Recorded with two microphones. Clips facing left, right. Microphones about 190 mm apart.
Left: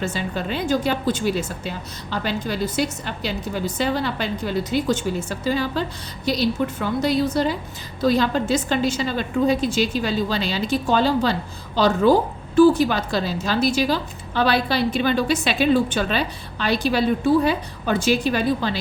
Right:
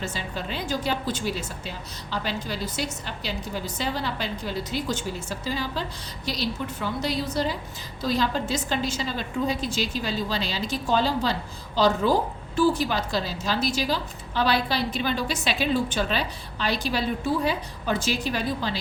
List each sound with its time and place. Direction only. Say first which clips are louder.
0.0 s a woman's voice: left 6 dB; 50° left (ahead or behind)